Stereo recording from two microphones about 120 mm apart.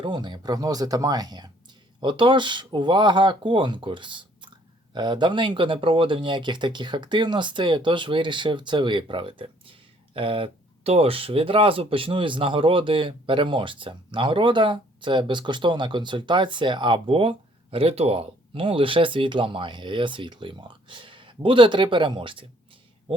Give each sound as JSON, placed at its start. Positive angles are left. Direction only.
{"t": 0.0, "sound": "speech", "side_deg": -40}